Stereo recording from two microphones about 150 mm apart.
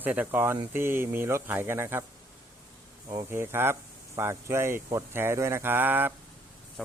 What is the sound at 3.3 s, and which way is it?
Speech, 15° right (ahead or behind).